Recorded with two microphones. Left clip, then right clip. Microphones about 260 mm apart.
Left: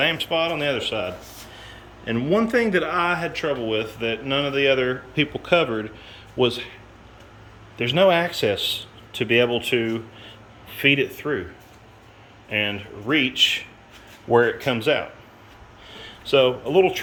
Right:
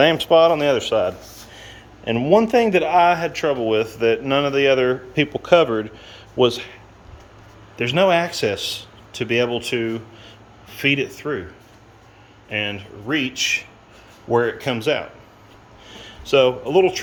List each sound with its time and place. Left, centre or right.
0.0 s a man's voice: right; by 6.7 s centre
7.8 s speech: centre
12.5 s speech: centre
15.9 s a sound: centre
16.3 s speech: centre